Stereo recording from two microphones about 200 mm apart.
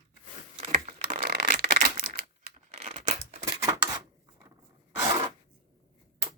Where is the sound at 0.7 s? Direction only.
45° right (ahead or behind).